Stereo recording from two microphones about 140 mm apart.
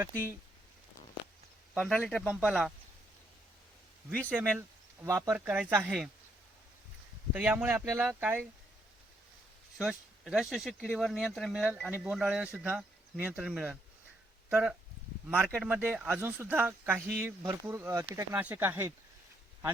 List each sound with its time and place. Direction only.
0.0 s speech: 15° right (ahead or behind)
1.7 s speech: 5° right (ahead or behind)
4.3 s speech: 10° right (ahead or behind)
5.0 s speech: 25° right (ahead or behind)
5.3 s speech: 10° right (ahead or behind)
7.3 s speech: 10° right (ahead or behind)
9.7 s speech: 5° right (ahead or behind)